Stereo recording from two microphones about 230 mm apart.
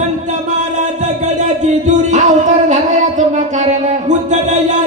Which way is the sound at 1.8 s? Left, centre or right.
Right.